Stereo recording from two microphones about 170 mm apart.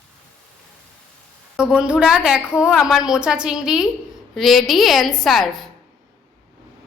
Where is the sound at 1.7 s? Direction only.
5° right (ahead or behind).